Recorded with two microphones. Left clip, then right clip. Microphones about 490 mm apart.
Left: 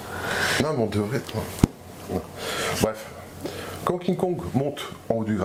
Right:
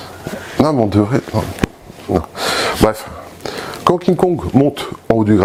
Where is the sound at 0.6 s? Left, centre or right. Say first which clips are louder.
Right 11 dB; right.